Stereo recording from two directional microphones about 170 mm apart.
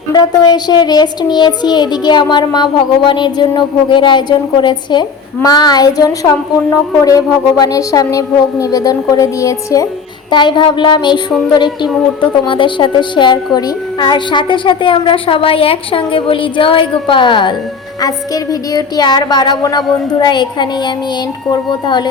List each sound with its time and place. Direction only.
0.1 s a child's voice: 25° left (ahead or behind)
11.9 s speech: centre (ahead or behind)
12.5 s a child's voice: 30° left (ahead or behind)